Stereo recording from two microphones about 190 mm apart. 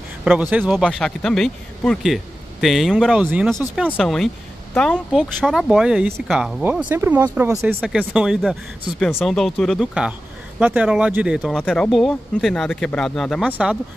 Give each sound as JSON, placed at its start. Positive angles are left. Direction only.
{"t": 0.2, "sound": "speech", "side_deg": -5}